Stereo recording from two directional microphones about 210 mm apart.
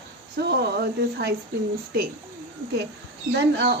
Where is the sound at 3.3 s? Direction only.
55° right (ahead or behind).